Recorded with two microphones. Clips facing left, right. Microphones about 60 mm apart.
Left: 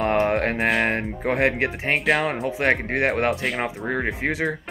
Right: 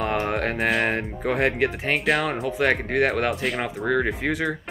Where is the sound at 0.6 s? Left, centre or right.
Centre.